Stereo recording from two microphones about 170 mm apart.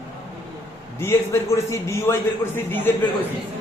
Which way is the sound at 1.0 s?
15° left (ahead or behind).